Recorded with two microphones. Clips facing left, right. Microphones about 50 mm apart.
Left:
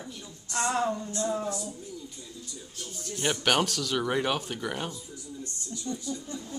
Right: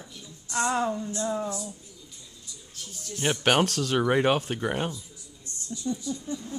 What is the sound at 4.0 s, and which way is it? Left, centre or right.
Speech, right.